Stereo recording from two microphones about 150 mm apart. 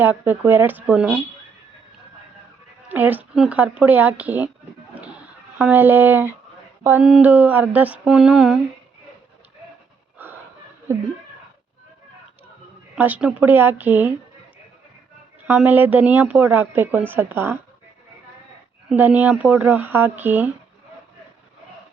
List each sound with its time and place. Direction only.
0.0 s a woman's voice: 10° right (ahead or behind)
2.9 s a woman's voice: 10° right (ahead or behind)
5.5 s a woman's voice: 10° right (ahead or behind)
13.0 s a woman's voice: 10° right (ahead or behind)
15.4 s a woman's voice: 10° right (ahead or behind)
18.9 s a woman's voice: 10° right (ahead or behind)